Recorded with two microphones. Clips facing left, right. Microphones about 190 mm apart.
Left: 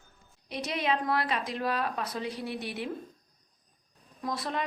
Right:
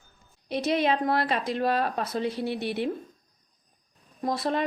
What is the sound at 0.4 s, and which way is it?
Speech, 30° right (ahead or behind).